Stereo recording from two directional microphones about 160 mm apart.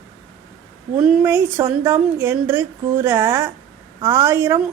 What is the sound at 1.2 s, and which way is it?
A woman's voice, 15° right (ahead or behind).